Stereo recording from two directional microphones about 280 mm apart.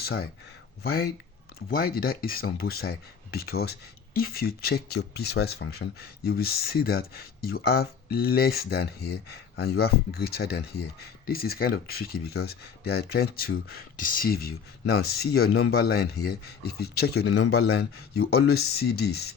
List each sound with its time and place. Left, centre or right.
0.0 s speech: left